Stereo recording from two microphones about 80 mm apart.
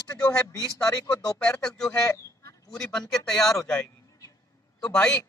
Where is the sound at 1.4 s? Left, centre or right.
Centre.